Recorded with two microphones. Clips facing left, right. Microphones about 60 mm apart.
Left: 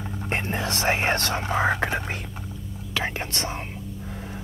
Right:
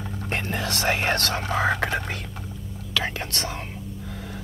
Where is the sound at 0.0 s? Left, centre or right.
Centre.